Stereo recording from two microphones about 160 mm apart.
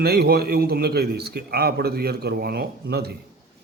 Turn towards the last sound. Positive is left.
turn(degrees=-80)